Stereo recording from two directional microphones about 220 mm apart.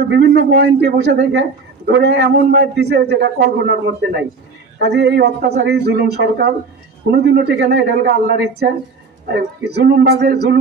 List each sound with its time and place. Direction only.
0.1 s a man's voice: 50° right (ahead or behind)
9.3 s a man's voice: 50° right (ahead or behind)